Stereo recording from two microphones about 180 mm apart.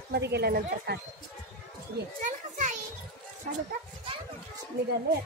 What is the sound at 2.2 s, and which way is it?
Speech, 45° right (ahead or behind).